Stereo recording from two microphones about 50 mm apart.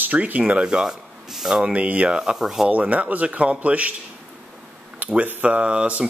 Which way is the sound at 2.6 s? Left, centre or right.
Right.